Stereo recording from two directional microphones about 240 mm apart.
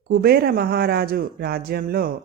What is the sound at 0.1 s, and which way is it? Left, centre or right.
Speech, right.